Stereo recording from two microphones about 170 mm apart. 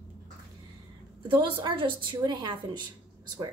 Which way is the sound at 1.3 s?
30° right (ahead or behind).